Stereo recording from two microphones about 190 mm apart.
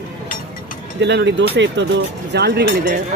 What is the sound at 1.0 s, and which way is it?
Speech, 65° right (ahead or behind).